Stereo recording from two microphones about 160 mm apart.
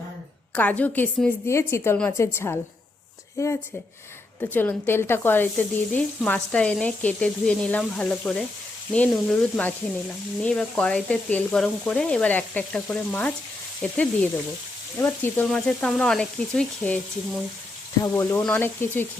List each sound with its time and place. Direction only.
0.5 s speech: 10° left (ahead or behind)
15.4 s frying: 5° left (ahead or behind)
18.1 s speech: 10° left (ahead or behind)